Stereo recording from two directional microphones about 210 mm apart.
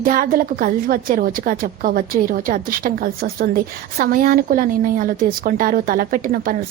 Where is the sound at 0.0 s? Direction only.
40° right (ahead or behind).